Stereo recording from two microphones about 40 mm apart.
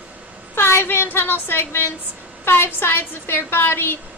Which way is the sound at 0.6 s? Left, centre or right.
Left.